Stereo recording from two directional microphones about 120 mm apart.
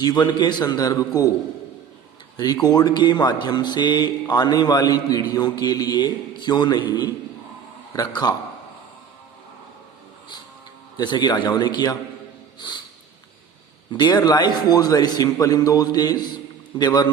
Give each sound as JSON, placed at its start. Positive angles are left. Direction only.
{"t": 0.0, "sound": "speech", "side_deg": 35}
{"t": 2.3, "sound": "speech", "side_deg": 30}
{"t": 10.9, "sound": "speech", "side_deg": 40}
{"t": 13.9, "sound": "speech", "side_deg": 35}